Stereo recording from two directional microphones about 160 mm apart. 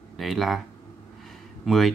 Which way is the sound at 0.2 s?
Centre (ahead or behind).